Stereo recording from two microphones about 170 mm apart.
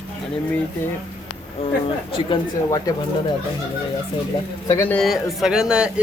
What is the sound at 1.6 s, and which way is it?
Speech, 35° left (ahead or behind).